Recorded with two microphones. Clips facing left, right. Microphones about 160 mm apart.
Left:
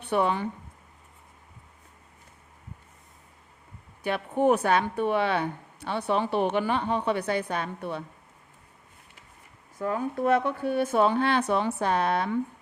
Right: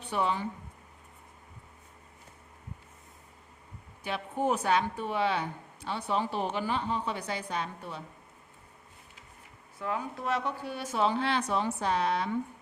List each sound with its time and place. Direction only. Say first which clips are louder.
0.0 s speech: left 5 dB; 60° left (ahead or behind)
4.0 s speech: left 7 dB; 60° left (ahead or behind)
9.7 s speech: left 6 dB; 45° left (ahead or behind)